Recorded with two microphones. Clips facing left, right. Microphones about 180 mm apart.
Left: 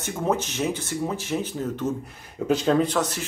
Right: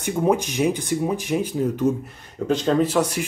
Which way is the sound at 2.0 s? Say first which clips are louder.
Right 1 dB; 5° left (ahead or behind).